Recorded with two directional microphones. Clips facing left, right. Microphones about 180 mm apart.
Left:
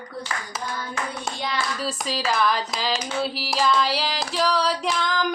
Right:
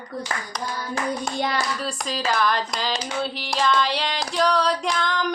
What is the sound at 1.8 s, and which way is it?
Speech, centre (ahead or behind).